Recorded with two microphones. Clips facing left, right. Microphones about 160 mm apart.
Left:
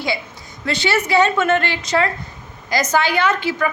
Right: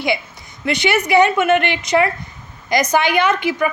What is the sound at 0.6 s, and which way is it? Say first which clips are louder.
A woman's voice: right 2 dB; 15° right (ahead or behind).